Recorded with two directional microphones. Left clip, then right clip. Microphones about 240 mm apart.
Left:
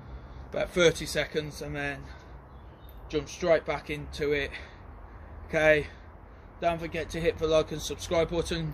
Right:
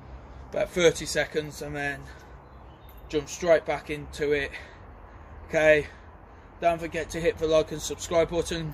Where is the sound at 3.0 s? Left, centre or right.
Centre.